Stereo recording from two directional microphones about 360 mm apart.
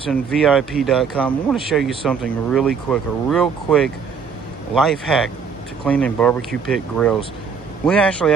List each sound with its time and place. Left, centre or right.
0.3 s speech: centre